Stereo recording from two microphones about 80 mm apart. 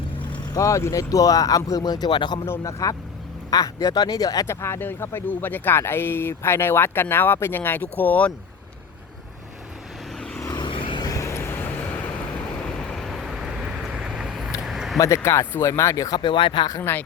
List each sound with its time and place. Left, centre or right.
0.5 s speech: left
2.5 s speech: left
3.5 s speech: left
4.4 s speech: left
10.4 s vehicle: left
10.7 s vehicle: left
11.0 s vehicle: left
12.5 s vehicle: centre
14.6 s a sound: centre
14.9 s speech: left
16.1 s speech: left
16.9 s speech: left